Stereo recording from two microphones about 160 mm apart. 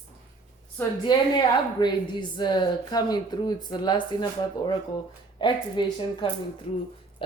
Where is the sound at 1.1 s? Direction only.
25° left (ahead or behind).